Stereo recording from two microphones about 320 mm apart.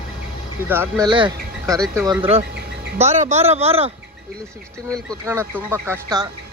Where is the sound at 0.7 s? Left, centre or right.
Centre.